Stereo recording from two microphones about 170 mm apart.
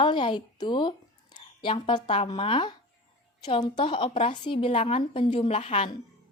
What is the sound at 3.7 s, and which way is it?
Speech, 30° left (ahead or behind).